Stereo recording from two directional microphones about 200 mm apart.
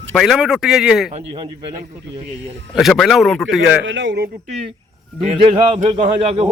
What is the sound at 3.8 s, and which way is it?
Speech, 65° right (ahead or behind).